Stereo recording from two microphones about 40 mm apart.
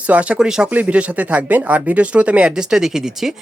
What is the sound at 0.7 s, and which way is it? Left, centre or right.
Speech, right.